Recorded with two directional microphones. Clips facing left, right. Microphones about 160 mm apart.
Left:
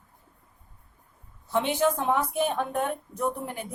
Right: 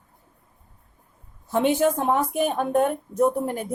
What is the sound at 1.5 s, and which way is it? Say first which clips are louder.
Speech: right 4 dB; 45° right (ahead or behind).